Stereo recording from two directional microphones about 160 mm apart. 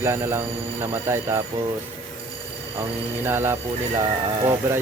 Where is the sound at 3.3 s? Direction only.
15° right (ahead or behind).